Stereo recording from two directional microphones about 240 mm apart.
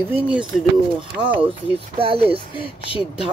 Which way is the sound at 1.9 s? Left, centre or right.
Right.